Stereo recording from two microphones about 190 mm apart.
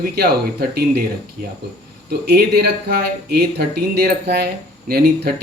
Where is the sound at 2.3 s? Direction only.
55° right (ahead or behind).